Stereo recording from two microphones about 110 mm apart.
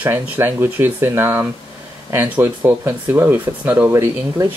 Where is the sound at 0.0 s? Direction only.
20° right (ahead or behind).